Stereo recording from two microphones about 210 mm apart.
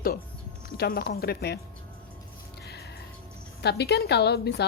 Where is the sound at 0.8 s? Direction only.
50° left (ahead or behind).